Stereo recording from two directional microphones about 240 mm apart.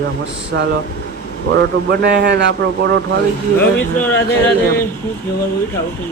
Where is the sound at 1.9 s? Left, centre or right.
Right.